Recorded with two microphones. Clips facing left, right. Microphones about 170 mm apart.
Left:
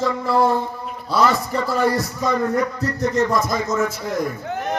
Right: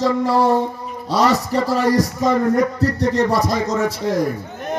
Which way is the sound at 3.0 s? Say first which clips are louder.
Even; 35° right (ahead or behind).